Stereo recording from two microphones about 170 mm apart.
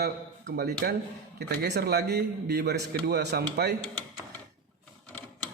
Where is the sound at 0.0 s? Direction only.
70° right (ahead or behind).